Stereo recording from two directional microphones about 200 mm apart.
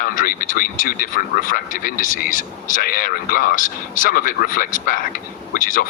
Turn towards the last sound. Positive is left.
turn(degrees=40)  # may be behind; listen again after turning